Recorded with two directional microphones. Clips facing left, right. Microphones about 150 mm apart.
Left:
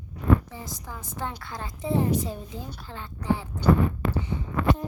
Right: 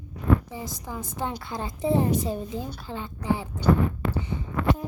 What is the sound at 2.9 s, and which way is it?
Speech, 15° right (ahead or behind).